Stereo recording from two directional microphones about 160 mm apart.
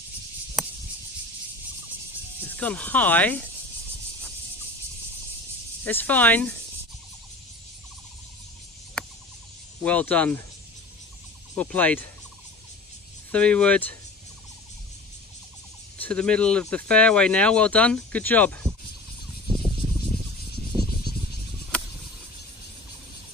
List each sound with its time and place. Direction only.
0.6 s a sound: centre (ahead or behind)
2.5 s speech: 10° left (ahead or behind)
5.9 s speech: 10° left (ahead or behind)
9.0 s cricket: 5° left (ahead or behind)
9.8 s speech: 10° left (ahead or behind)
11.5 s speech: 10° left (ahead or behind)
13.3 s speech: 5° left (ahead or behind)
16.0 s speech: 5° left (ahead or behind)
20.7 s a sound: 30° right (ahead or behind)